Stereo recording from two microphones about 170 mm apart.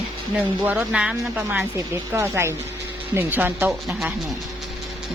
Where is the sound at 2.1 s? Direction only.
15° right (ahead or behind).